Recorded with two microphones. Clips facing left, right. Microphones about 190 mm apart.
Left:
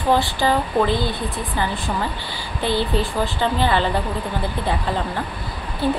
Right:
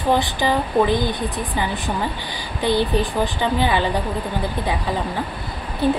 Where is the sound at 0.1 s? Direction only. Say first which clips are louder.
Left 1 dB; 15° right (ahead or behind).